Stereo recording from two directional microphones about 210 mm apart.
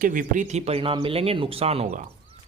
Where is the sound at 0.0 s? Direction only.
40° right (ahead or behind).